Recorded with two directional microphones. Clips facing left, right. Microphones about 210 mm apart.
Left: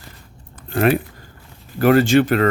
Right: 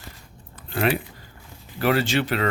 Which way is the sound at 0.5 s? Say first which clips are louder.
Left 6 dB; 50° left (ahead or behind).